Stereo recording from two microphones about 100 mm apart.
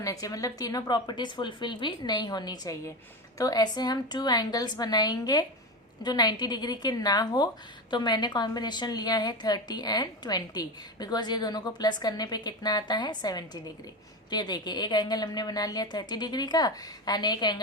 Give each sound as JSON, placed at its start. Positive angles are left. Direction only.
{"t": 0.0, "sound": "a woman's voice", "side_deg": 35}